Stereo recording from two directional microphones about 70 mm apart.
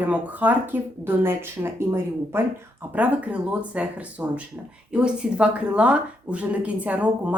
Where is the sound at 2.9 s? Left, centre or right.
Right.